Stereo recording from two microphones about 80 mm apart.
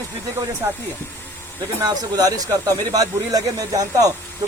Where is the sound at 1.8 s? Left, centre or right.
Right.